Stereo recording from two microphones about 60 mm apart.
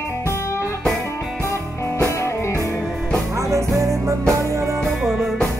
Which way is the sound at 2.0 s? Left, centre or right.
Left.